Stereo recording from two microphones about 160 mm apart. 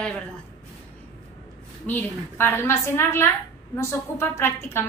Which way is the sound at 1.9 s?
10° left (ahead or behind).